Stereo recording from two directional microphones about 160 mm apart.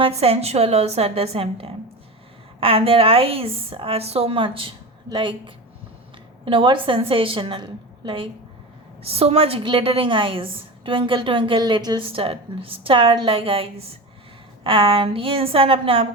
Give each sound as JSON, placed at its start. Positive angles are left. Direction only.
{"t": 0.0, "sound": "a woman's voice", "side_deg": -40}
{"t": 6.4, "sound": "a woman's voice", "side_deg": -30}